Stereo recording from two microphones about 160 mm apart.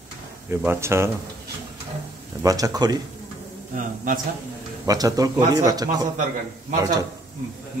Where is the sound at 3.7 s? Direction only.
55° right (ahead or behind).